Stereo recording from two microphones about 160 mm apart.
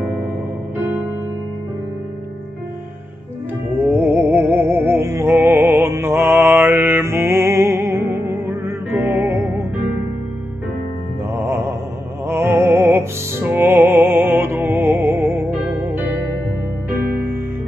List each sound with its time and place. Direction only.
3.8 s music: 10° right (ahead or behind)
5.0 s mantra: 15° right (ahead or behind)
11.3 s mantra: 15° right (ahead or behind)
12.3 s music: 15° right (ahead or behind)